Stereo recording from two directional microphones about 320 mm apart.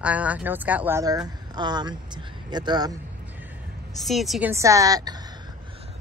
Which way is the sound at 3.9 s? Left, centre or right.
Centre.